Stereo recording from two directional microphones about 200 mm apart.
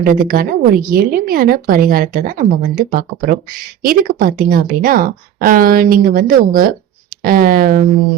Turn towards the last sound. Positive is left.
turn(degrees=-45)  # may be behind; listen again after turning